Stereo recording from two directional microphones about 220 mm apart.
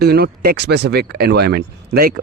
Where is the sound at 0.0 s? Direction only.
45° right (ahead or behind).